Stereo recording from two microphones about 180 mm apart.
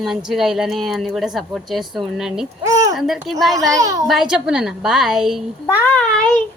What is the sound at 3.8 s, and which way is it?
Speech, 15° right (ahead or behind).